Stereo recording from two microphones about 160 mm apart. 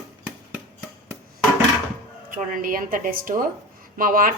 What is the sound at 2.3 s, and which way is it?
A woman's voice, 60° right (ahead or behind).